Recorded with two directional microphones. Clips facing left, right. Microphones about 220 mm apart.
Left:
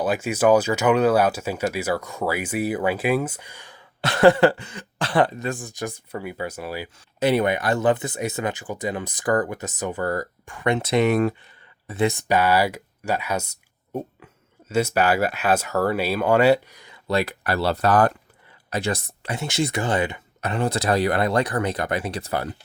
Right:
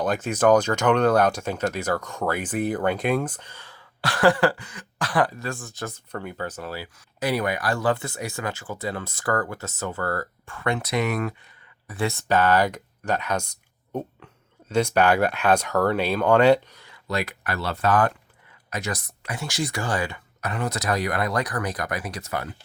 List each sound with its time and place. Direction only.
0.0 s speech: 5° left (ahead or behind)
6.9 s speech: 25° left (ahead or behind)
17.1 s speech: 30° left (ahead or behind)